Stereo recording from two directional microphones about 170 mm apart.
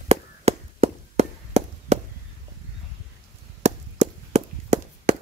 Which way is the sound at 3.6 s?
40° right (ahead or behind).